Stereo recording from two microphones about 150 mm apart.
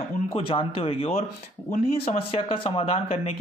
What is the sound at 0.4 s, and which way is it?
Speech, 35° left (ahead or behind).